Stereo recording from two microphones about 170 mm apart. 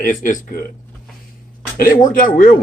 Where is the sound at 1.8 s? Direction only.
55° left (ahead or behind).